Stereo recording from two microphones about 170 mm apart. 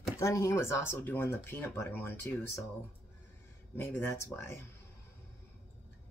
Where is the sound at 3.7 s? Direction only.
15° left (ahead or behind).